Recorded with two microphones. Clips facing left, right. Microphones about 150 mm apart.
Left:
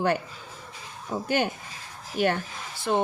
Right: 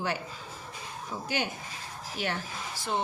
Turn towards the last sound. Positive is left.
turn(degrees=55)  # may be behind; listen again after turning